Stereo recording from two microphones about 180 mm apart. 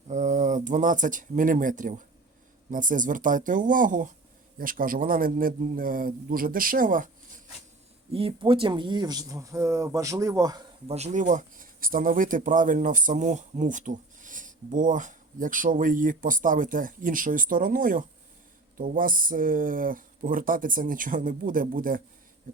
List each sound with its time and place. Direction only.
0.1 s speech: 40° right (ahead or behind)
8.1 s speech: 30° right (ahead or behind)
10.8 s speech: 35° right (ahead or behind)